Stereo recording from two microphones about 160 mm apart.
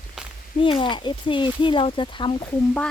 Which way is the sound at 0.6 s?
30° left (ahead or behind).